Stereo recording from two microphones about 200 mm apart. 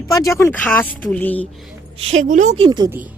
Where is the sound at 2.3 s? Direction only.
40° right (ahead or behind).